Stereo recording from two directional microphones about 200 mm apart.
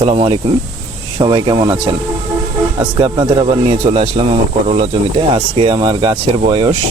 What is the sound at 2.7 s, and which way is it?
Speech, 20° right (ahead or behind).